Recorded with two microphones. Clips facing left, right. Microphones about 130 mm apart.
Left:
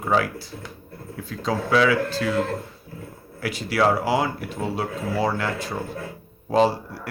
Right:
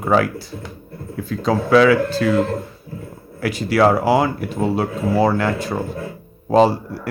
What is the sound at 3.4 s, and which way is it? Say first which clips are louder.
Speech: right 6 dB; 50° right (ahead or behind).